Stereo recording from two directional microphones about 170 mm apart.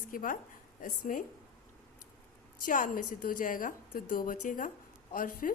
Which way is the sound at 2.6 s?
55° left (ahead or behind).